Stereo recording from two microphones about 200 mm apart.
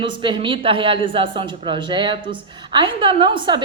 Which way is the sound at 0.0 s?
25° right (ahead or behind).